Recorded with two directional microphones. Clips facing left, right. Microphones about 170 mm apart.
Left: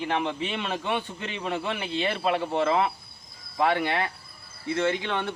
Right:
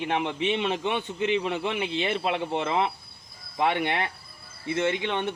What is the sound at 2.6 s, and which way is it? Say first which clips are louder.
Speech: left 2 dB; 20° right (ahead or behind).